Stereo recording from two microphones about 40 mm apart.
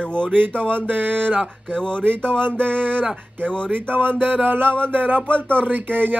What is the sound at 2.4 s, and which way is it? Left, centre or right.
Speech, right.